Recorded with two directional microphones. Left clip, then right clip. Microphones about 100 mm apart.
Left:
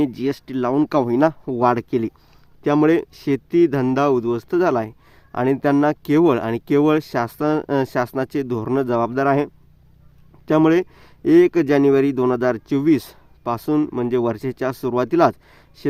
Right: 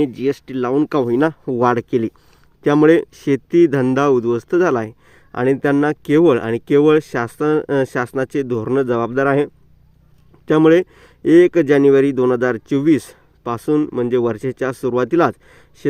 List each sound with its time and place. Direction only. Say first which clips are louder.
0.0 s speech: right 3 dB; 15° right (ahead or behind)
1.5 s speech: right 2 dB; 35° right (ahead or behind)
2.6 s speech: right 4 dB; 45° right (ahead or behind); by 15.9 s 20° right (ahead or behind)